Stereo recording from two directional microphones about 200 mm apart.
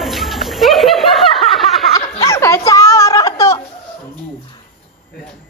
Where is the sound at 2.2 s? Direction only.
15° left (ahead or behind).